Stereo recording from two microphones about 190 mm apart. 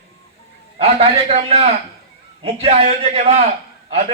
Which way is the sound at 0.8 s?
35° right (ahead or behind).